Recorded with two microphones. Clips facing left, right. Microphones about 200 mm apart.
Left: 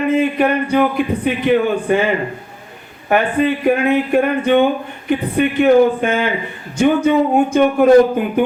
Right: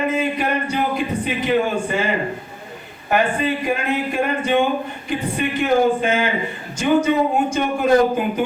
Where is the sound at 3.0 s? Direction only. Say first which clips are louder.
Left 4 dB; 55° left (ahead or behind).